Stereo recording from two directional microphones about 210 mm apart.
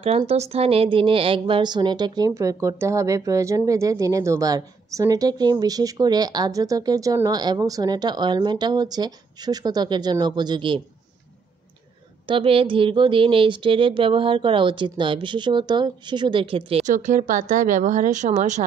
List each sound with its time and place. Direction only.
0.0 s a woman's voice: 30° right (ahead or behind)
12.3 s a woman's voice: 25° right (ahead or behind)